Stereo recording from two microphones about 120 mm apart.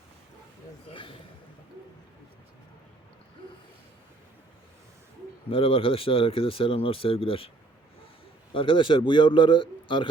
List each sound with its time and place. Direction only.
0.9 s a sound: 45° left (ahead or behind)
5.5 s speech: 50° left (ahead or behind)
8.5 s speech: 45° left (ahead or behind)